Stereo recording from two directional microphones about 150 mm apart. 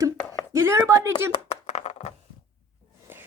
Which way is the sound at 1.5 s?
50° left (ahead or behind).